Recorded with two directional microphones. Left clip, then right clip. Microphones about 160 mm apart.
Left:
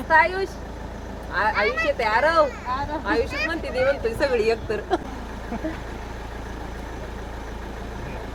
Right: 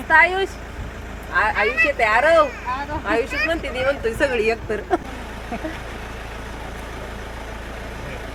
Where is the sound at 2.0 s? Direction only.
50° right (ahead or behind).